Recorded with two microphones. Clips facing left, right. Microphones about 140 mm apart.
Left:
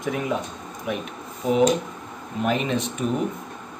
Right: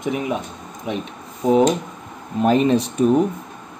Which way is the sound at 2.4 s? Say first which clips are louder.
Right 7 dB; 35° right (ahead or behind).